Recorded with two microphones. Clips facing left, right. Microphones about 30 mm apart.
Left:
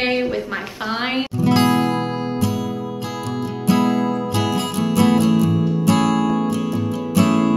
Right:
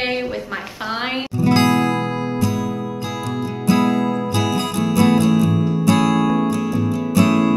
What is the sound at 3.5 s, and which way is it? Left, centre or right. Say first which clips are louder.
Music: right 1 dB; right.